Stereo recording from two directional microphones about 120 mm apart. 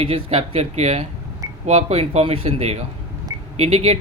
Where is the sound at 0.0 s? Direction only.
55° right (ahead or behind).